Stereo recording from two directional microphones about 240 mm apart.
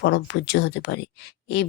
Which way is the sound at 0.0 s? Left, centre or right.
Left.